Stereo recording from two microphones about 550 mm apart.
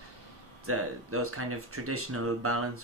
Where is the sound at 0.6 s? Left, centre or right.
Right.